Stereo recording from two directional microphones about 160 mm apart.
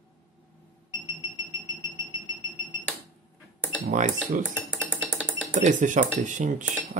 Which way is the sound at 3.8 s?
45° right (ahead or behind).